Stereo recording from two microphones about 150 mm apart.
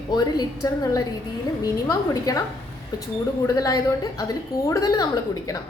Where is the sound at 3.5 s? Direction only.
25° left (ahead or behind).